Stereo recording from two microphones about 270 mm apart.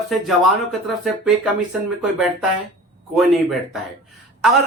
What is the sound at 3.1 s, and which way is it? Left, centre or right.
Speech, centre.